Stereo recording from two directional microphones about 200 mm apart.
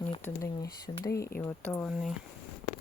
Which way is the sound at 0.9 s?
20° left (ahead or behind).